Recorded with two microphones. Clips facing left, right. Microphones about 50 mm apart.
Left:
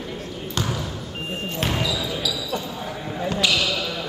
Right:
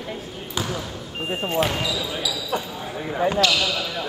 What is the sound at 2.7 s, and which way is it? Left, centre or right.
Basketball bounce, centre.